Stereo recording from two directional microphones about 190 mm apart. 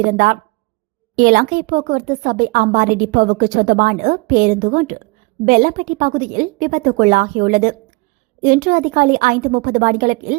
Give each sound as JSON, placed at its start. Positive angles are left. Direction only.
{"t": 0.0, "sound": "speech", "side_deg": -45}